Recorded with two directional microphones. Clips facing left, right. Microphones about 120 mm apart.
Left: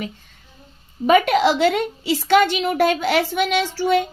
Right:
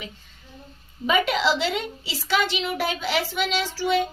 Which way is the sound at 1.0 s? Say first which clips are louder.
Left 7 dB; 50° left (ahead or behind).